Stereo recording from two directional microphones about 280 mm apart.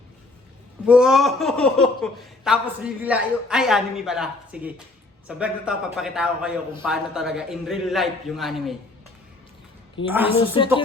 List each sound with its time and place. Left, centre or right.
0.9 s speech: centre
10.0 s a woman's voice: centre